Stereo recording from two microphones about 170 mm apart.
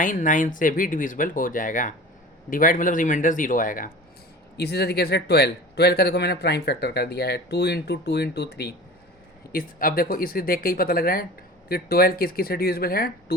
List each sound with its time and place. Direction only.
0.0 s speech: 50° left (ahead or behind)
4.5 s speech: 70° left (ahead or behind)
9.5 s speech: 55° left (ahead or behind)